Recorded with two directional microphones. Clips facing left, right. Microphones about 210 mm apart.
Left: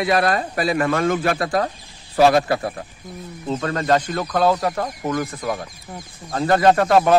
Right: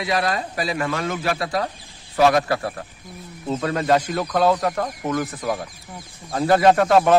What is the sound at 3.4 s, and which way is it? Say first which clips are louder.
Speech: even; 10° right (ahead or behind).